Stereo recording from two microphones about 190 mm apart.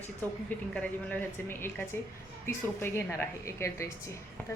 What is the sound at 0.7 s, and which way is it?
A woman's voice, 5° left (ahead or behind).